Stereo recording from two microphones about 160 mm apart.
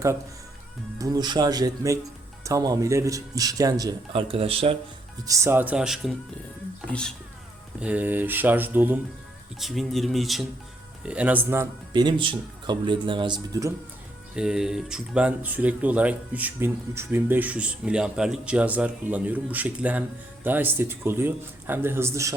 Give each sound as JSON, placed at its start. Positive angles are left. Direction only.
{"t": 0.9, "sound": "speech", "side_deg": -25}
{"t": 5.2, "sound": "speech", "side_deg": -20}
{"t": 7.8, "sound": "speech", "side_deg": -10}
{"t": 9.6, "sound": "speech", "side_deg": 0}
{"t": 12.0, "sound": "speech", "side_deg": -30}
{"t": 14.3, "sound": "speech", "side_deg": -5}